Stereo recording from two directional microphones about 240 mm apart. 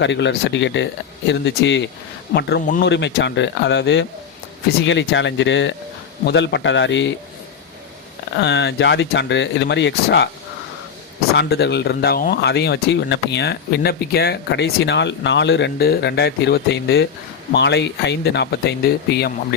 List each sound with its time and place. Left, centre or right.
0.0 s speech: left
8.4 s speech: left
11.3 s speech: left